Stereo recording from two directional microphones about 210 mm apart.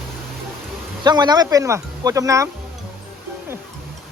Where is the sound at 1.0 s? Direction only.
20° right (ahead or behind).